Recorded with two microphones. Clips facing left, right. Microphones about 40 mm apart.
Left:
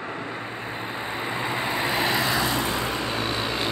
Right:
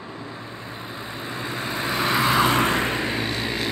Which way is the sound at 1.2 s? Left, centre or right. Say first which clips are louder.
Left 2 dB; left.